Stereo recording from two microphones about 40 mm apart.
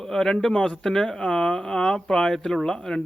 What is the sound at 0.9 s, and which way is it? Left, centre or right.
Speech, centre.